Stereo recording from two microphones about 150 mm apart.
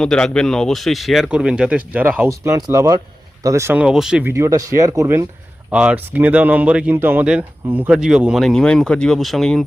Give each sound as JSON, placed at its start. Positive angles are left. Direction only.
{"t": 0.0, "sound": "speech", "side_deg": 5}
{"t": 4.3, "sound": "speech", "side_deg": -20}
{"t": 5.7, "sound": "speech", "side_deg": -10}